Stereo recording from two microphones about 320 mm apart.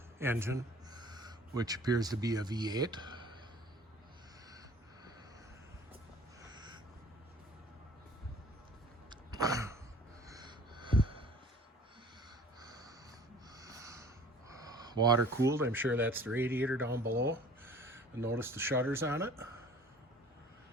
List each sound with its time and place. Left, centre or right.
0.2 s speech: centre
6.5 s a sound: centre
9.0 s a sound: centre
10.2 s gasp: centre
12.5 s crow: centre
13.6 s snort: centre
14.5 s speech: centre
17.0 s speech: right
17.2 s speech: centre